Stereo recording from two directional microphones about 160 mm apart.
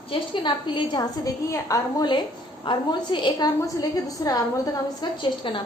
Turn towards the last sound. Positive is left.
turn(degrees=30)  # may be behind; listen again after turning